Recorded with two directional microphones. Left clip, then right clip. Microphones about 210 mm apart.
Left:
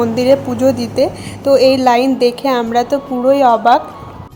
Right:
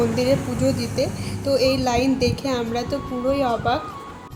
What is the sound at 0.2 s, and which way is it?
A woman's voice, 30° left (ahead or behind).